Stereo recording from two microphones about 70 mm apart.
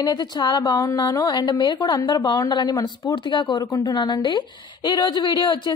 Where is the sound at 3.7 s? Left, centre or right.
Left.